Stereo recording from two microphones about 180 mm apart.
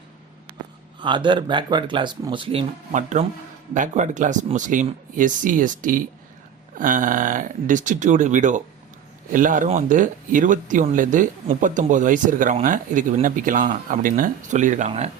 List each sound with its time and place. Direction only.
0.9 s speech: 25° right (ahead or behind)